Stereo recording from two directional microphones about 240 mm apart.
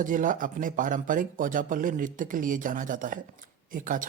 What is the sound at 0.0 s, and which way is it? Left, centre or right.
Speech, right.